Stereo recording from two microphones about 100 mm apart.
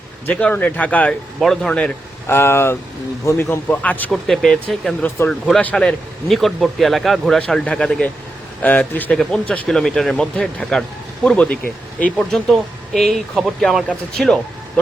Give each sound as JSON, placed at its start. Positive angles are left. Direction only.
{"t": 0.3, "sound": "a man's voice", "side_deg": 15}
{"t": 1.4, "sound": "speech", "side_deg": 5}
{"t": 2.2, "sound": "a man's voice", "side_deg": 25}
{"t": 4.1, "sound": "speech", "side_deg": 5}
{"t": 5.0, "sound": "speech", "side_deg": 25}
{"t": 5.3, "sound": "a man's voice", "side_deg": 10}